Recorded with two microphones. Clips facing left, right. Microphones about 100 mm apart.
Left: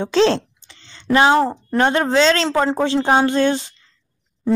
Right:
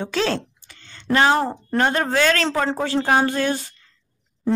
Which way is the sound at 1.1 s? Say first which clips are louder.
Left 3 dB; 20° left (ahead or behind).